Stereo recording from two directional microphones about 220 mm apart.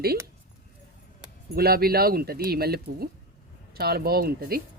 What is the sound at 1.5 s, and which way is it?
Speech, 45° right (ahead or behind).